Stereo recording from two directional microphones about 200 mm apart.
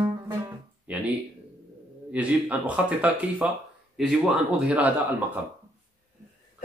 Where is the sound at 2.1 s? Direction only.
5° right (ahead or behind).